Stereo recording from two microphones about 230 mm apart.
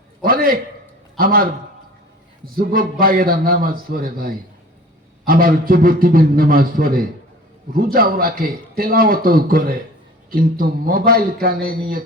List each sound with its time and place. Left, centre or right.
0.2 s a sound: right
1.1 s a man's voice: right
2.6 s a man's voice: right